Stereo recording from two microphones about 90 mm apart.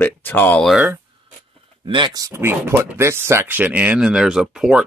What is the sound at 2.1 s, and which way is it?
Speech, 40° right (ahead or behind).